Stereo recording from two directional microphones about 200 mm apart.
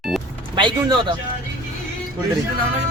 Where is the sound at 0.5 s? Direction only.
25° right (ahead or behind).